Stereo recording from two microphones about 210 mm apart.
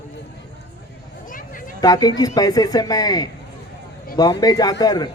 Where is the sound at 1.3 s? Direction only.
40° left (ahead or behind).